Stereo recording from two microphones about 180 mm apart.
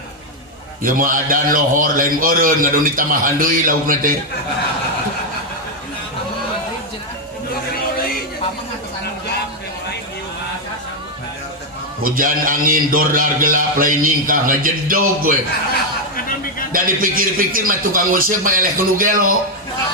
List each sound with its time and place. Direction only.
0.8 s a man's voice: 50° right (ahead or behind)
12.0 s a man's voice: 50° right (ahead or behind)
16.7 s a man's voice: 50° right (ahead or behind)